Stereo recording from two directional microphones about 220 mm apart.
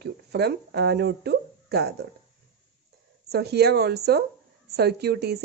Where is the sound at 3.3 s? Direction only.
45° right (ahead or behind).